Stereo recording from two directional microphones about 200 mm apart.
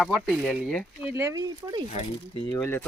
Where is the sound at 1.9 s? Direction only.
35° left (ahead or behind).